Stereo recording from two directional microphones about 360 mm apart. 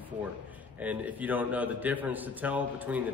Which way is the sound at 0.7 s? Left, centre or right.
Centre.